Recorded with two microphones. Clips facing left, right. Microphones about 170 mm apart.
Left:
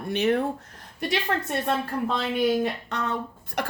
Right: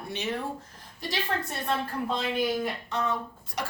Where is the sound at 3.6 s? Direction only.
55° left (ahead or behind).